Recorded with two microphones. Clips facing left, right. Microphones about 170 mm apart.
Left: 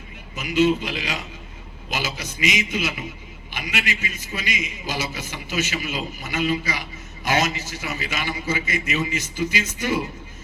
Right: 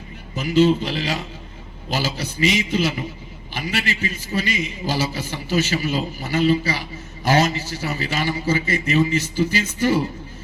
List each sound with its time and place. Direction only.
0.3 s a man's voice: 35° right (ahead or behind)